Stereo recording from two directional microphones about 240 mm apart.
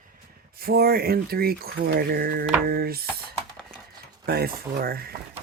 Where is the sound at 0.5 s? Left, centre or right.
Right.